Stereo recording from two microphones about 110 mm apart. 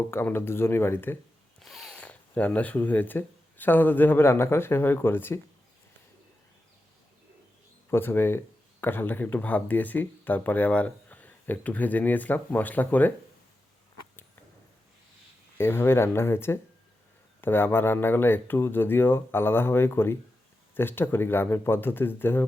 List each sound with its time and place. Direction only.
0.1 s speech: 20° left (ahead or behind)
1.5 s a sound: centre (ahead or behind)
2.0 s speech: 10° left (ahead or behind)
7.9 s speech: 20° left (ahead or behind)
15.5 s speech: 20° left (ahead or behind)